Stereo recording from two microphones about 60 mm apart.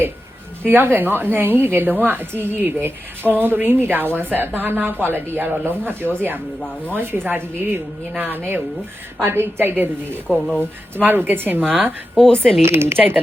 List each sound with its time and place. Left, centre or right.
0.6 s a woman's voice: right
10.2 s speech: centre
10.9 s a woman's voice: right
12.1 s speech: centre
12.6 s speech: right
13.0 s speech: right